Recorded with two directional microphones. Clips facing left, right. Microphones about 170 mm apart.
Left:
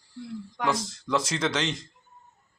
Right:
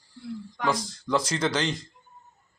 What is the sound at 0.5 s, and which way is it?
Speech, centre (ahead or behind).